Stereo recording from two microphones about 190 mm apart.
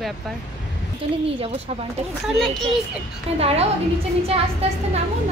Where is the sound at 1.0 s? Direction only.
30° right (ahead or behind).